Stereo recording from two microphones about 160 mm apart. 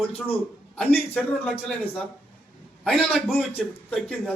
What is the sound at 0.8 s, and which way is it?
Speech, centre (ahead or behind).